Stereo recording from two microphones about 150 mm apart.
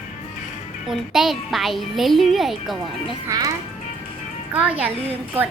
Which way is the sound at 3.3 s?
20° right (ahead or behind).